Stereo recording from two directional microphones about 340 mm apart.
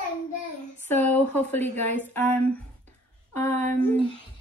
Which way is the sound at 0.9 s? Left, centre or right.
Centre.